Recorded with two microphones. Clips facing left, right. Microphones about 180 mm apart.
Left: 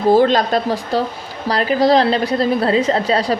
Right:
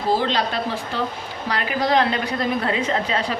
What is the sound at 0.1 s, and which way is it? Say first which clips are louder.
A woman's voice: left 8 dB; 50° left (ahead or behind).